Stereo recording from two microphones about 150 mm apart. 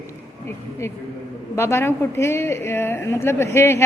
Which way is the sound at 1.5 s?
15° left (ahead or behind).